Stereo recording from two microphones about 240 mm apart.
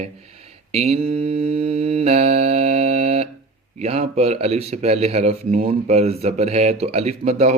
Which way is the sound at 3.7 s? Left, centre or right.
Right.